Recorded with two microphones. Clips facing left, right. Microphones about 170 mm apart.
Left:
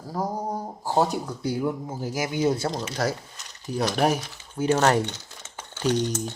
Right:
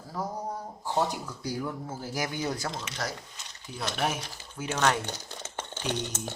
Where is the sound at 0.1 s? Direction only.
35° left (ahead or behind).